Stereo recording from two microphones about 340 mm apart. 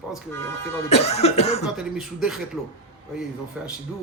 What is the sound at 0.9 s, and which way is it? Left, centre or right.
Cough, centre.